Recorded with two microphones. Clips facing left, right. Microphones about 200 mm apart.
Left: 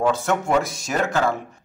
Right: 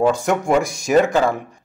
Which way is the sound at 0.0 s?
15° right (ahead or behind).